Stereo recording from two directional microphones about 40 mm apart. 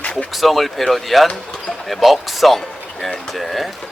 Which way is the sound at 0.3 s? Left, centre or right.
Centre.